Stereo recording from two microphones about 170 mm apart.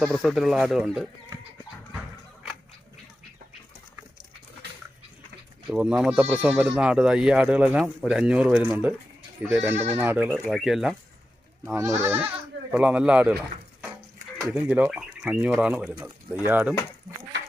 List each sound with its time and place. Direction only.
0.0 s speech: centre (ahead or behind)
5.6 s speech: 5° right (ahead or behind)
10.5 s speech: centre (ahead or behind)
11.6 s speech: 15° right (ahead or behind)
14.5 s speech: 10° right (ahead or behind)